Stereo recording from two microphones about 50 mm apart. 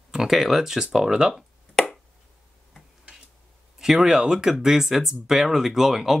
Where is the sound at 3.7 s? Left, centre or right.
Centre.